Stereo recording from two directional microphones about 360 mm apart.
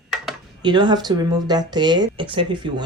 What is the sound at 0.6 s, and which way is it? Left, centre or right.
Speech, centre.